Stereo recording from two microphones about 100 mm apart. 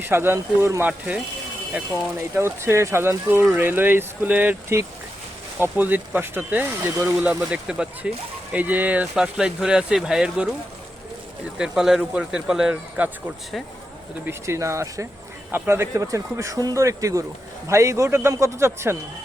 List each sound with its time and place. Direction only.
0.0 s speech: 25° right (ahead or behind)
0.9 s speech: 15° right (ahead or behind)
2.3 s speech: 25° right (ahead or behind); by 10.5 s 10° right (ahead or behind)
11.5 s speech: 5° right (ahead or behind)
14.3 s speech: 30° right (ahead or behind)